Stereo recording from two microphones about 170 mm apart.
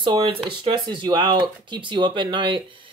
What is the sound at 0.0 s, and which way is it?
Speech, 30° right (ahead or behind).